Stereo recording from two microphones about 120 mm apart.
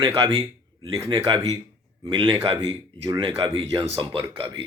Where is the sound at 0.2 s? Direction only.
50° right (ahead or behind).